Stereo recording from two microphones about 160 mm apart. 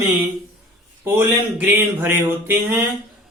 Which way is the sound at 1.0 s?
15° right (ahead or behind).